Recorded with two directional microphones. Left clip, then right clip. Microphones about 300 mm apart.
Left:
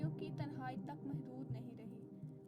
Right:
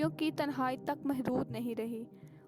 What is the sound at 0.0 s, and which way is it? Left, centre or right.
Speech, right.